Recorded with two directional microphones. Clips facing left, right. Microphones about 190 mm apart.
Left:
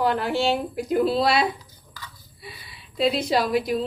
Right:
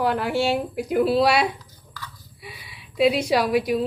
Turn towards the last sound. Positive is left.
turn(degrees=-10)  # may be behind; listen again after turning